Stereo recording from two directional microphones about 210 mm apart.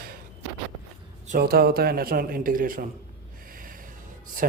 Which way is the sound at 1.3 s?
45° right (ahead or behind).